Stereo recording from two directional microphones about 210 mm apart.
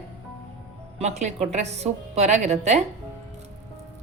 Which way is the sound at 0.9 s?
30° right (ahead or behind).